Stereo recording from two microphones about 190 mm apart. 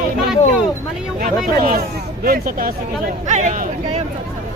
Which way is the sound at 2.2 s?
50° right (ahead or behind).